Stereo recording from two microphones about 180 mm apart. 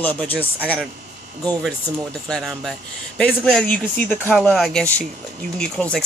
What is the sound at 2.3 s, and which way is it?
Speech, centre (ahead or behind).